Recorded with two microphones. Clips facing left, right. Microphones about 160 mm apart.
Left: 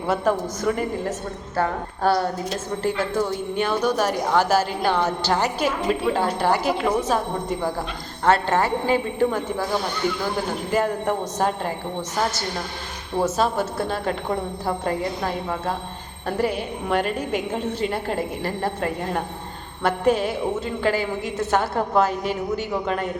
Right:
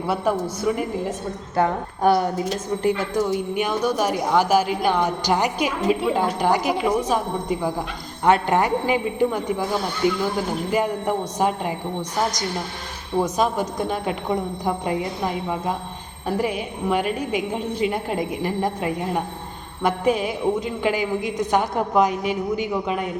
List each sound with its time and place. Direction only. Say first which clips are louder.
0.1 s a woman's voice: left 1 dB; 10° right (ahead or behind)
13.2 s a woman's voice: left 3 dB; 15° right (ahead or behind)